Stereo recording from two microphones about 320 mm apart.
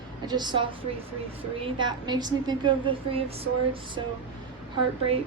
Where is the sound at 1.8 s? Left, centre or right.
Centre.